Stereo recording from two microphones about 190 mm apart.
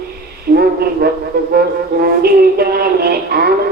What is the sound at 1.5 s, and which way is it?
Music, 55° right (ahead or behind).